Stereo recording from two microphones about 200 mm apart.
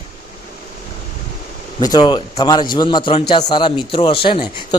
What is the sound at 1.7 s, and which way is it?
A man's voice, 20° left (ahead or behind).